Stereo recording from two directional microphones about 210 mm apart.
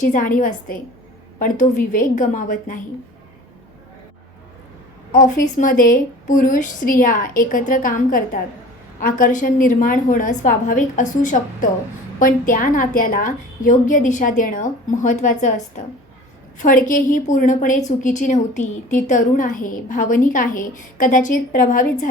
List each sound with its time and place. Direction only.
0.0 s a woman's voice: 40° left (ahead or behind)
5.1 s a woman's voice: 40° left (ahead or behind)
16.6 s a woman's voice: 40° left (ahead or behind)